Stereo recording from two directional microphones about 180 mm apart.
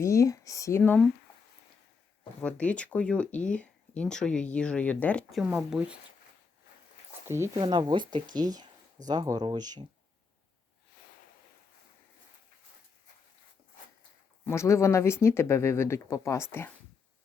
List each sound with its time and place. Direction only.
0.0 s speech: 15° left (ahead or behind)
0.8 s speech: 5° left (ahead or behind)
2.4 s speech: 5° left (ahead or behind)
7.3 s speech: 15° right (ahead or behind)
14.4 s speech: 15° left (ahead or behind)